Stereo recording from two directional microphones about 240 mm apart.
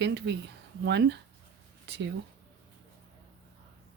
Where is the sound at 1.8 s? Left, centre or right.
Right.